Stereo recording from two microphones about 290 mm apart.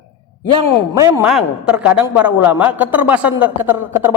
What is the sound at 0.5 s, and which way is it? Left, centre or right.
A man's voice, centre.